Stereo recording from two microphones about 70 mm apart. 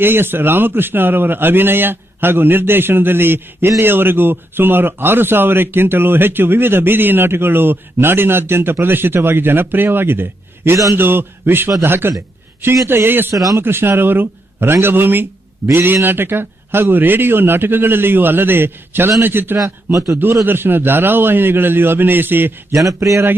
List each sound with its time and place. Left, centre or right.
0.0 s speech: right
13.3 s a man's voice: right
13.6 s speech: right
19.6 s a man's voice: right
20.4 s speech: right
22.9 s speech: right